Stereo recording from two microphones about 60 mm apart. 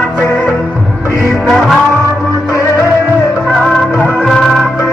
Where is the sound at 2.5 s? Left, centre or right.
Left.